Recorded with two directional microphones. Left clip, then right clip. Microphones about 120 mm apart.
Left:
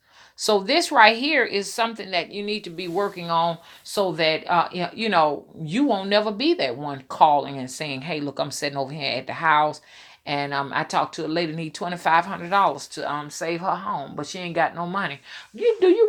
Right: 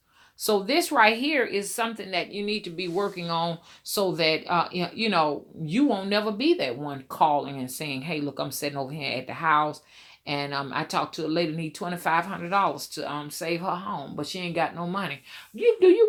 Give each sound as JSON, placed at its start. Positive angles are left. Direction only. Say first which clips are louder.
{"t": 0.4, "sound": "speech", "louder": "left 4 dB", "side_deg": 30}
{"t": 3.2, "sound": "speech", "louder": "left 6 dB", "side_deg": 5}
{"t": 3.9, "sound": "speech", "louder": "left 2 dB", "side_deg": 20}
{"t": 10.2, "sound": "speech", "louder": "left 4 dB", "side_deg": 25}